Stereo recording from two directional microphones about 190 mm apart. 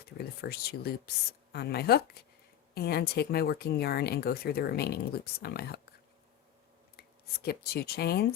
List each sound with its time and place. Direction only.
0.0 s speech: 55° left (ahead or behind)
6.9 s speech: 55° left (ahead or behind)